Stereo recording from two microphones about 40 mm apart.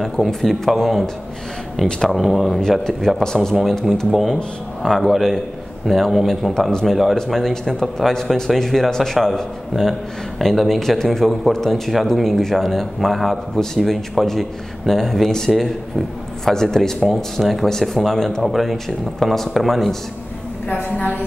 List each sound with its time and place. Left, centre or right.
0.0 s speech: centre
18.4 s speech: centre
20.6 s a woman's voice: left